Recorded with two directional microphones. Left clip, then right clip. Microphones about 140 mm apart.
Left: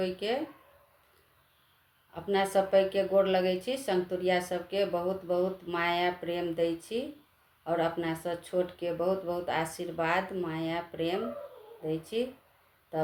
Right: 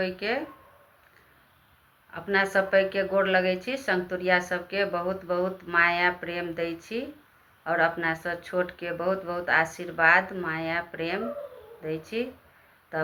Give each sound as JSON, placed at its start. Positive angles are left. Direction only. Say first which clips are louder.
{"t": 0.0, "sound": "speech", "louder": "right 3 dB", "side_deg": 45}
{"t": 2.1, "sound": "speech", "louder": "right 3 dB", "side_deg": 45}